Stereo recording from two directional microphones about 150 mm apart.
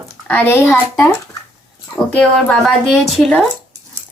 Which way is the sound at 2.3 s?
5° left (ahead or behind).